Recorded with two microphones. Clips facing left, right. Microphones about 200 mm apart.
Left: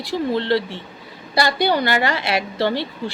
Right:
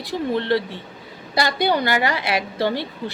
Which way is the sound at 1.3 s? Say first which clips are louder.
Left 1 dB; 20° right (ahead or behind).